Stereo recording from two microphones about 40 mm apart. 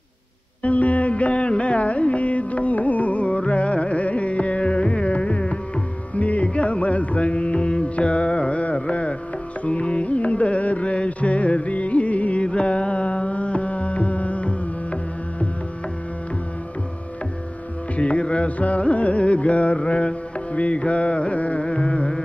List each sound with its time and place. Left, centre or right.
0.7 s music: left
6.1 s music: left
6.4 s carnatic music: left
17.9 s music: left